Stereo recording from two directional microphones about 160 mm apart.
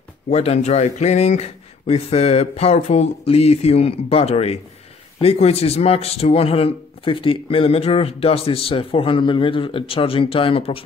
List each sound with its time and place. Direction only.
0.3 s speech: 40° left (ahead or behind)